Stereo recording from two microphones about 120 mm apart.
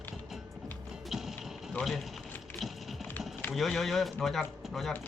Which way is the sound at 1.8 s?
15° left (ahead or behind).